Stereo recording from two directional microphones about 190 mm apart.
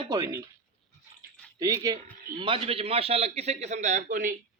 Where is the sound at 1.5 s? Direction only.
20° right (ahead or behind).